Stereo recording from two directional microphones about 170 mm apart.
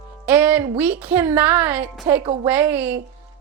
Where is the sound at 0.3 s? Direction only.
10° right (ahead or behind).